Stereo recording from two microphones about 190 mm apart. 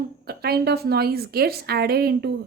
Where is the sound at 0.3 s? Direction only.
55° right (ahead or behind).